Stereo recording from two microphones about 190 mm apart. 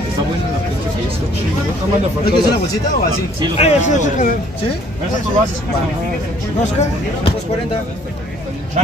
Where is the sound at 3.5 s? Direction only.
35° left (ahead or behind).